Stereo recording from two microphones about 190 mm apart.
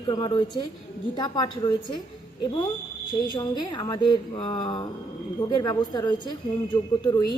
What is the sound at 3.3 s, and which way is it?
Speech, 20° left (ahead or behind).